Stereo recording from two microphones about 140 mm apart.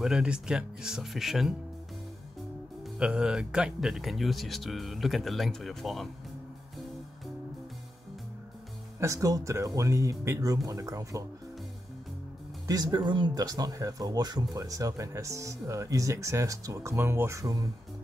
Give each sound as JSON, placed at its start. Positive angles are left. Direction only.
{"t": 0.0, "sound": "speech", "side_deg": -5}
{"t": 3.0, "sound": "speech", "side_deg": -5}
{"t": 9.0, "sound": "speech", "side_deg": -25}
{"t": 12.6, "sound": "speech", "side_deg": -30}